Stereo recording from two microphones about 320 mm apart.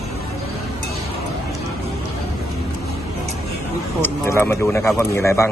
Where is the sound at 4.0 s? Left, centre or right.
Centre.